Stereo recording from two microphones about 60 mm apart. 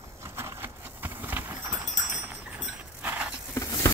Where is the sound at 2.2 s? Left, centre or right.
Right.